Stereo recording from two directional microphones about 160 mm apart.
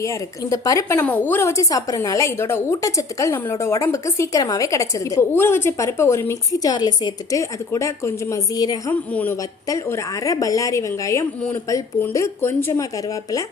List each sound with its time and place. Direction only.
0.0 s speech: 20° left (ahead or behind)